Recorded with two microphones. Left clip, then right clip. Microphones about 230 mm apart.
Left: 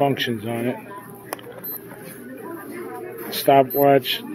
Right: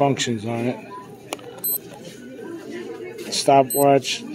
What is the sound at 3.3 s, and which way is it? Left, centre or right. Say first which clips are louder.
Speech: even; centre.